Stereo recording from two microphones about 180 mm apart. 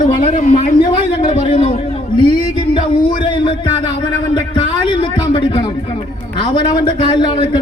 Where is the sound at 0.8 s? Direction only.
30° left (ahead or behind).